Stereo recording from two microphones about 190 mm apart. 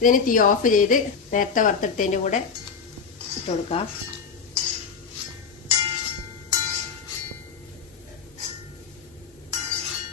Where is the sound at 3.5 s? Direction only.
35° left (ahead or behind).